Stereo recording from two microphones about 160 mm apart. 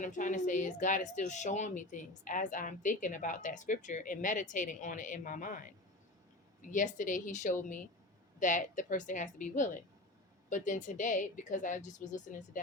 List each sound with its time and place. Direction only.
0.0 s a woman's voice: 50° left (ahead or behind)